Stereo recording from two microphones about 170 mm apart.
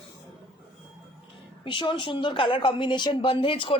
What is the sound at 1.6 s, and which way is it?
A woman's voice, 30° left (ahead or behind).